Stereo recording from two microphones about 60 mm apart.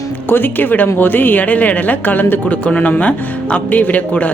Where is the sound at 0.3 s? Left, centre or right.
Left.